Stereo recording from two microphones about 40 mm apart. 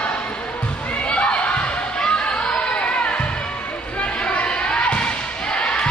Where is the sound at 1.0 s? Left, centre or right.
Left.